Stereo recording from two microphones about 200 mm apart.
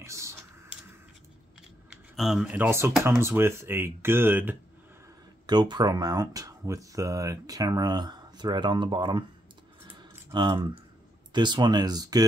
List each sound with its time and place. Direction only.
0.0 s typing: 15° right (ahead or behind)
1.9 s speech: centre (ahead or behind)
5.5 s speech: 20° right (ahead or behind)
10.3 s speech: 20° right (ahead or behind)